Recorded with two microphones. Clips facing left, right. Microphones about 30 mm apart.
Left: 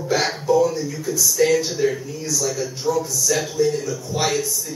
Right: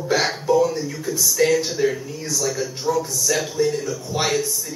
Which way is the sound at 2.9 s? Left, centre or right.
Right.